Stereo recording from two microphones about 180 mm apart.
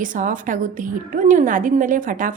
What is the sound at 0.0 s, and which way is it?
A woman's voice, 45° right (ahead or behind).